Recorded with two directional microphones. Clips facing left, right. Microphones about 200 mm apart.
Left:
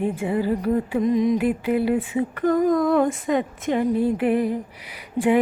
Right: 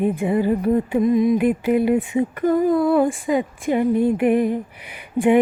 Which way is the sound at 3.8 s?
15° right (ahead or behind).